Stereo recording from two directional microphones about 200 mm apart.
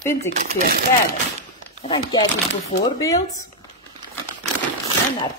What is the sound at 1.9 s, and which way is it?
Speech, 25° left (ahead or behind).